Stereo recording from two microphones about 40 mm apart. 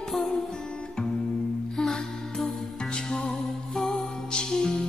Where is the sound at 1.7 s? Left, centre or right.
Centre.